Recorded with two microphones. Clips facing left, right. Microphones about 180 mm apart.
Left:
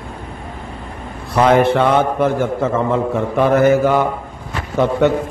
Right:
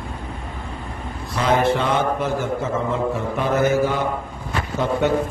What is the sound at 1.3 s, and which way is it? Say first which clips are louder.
A man's voice: left 6 dB; 60° left (ahead or behind).